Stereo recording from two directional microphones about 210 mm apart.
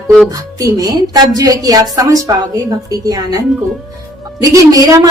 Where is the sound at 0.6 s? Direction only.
15° right (ahead or behind).